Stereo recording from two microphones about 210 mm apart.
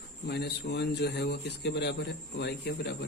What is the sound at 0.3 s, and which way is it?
A man's voice, 50° left (ahead or behind).